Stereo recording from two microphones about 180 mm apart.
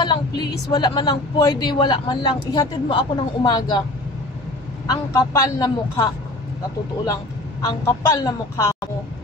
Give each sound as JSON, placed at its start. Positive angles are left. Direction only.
{"t": 0.0, "sound": "speech", "side_deg": 25}
{"t": 4.8, "sound": "speech", "side_deg": 20}
{"t": 7.6, "sound": "speech", "side_deg": 20}